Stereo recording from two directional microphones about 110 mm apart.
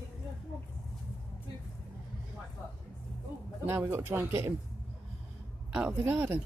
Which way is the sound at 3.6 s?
20° right (ahead or behind).